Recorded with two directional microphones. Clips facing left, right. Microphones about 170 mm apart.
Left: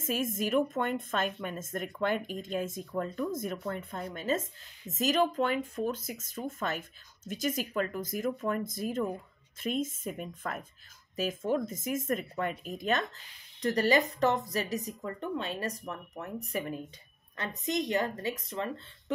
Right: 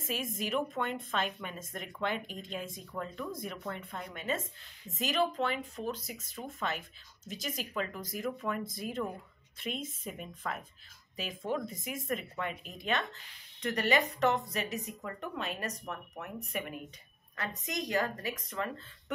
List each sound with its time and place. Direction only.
0.0 s a woman's voice: 45° left (ahead or behind); by 19.1 s 25° left (ahead or behind)